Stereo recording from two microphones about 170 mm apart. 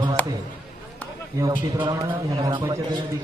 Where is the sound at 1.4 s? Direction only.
25° right (ahead or behind).